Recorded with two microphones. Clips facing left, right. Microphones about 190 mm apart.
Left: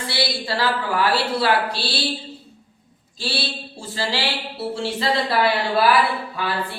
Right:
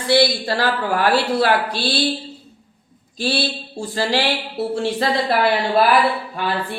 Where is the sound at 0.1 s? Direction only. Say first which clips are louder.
Right 10 dB; 50° right (ahead or behind).